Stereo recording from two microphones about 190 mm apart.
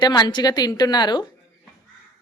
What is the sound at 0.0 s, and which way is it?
A woman's voice, 20° left (ahead or behind).